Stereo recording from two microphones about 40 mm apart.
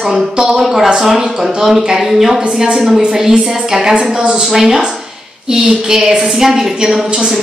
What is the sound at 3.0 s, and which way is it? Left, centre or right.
A woman's voice, centre.